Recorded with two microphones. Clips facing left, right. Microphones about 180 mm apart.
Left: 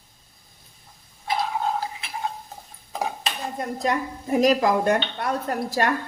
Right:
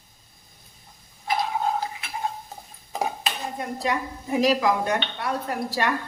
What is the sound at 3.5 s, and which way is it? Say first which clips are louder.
A woman's voice: left 3 dB; 45° left (ahead or behind).